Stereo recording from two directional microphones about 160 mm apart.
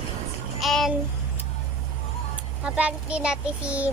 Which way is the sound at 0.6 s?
Centre (ahead or behind).